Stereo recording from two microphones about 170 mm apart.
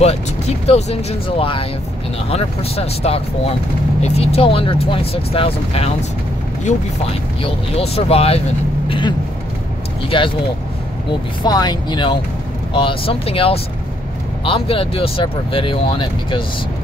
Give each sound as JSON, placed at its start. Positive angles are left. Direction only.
{"t": 0.0, "sound": "speech", "side_deg": 40}
{"t": 7.4, "sound": "speech", "side_deg": 35}
{"t": 8.8, "sound": "vehicle", "side_deg": 30}
{"t": 10.0, "sound": "speech", "side_deg": 30}